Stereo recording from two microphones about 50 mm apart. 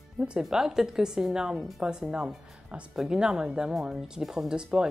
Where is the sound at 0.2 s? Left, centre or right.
Centre.